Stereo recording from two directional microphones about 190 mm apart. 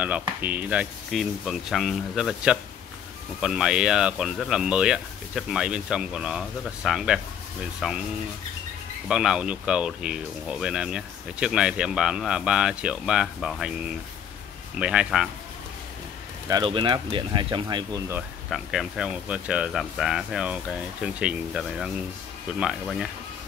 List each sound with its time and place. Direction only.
0.0 s speech: 5° right (ahead or behind)
9.1 s speech: 5° right (ahead or behind)
16.4 s speech: 25° right (ahead or behind)
18.5 s speech: centre (ahead or behind)